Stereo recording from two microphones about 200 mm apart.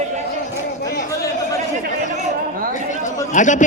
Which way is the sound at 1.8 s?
35° right (ahead or behind).